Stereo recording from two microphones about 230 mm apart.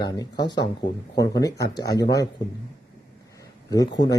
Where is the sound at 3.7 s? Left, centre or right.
Centre.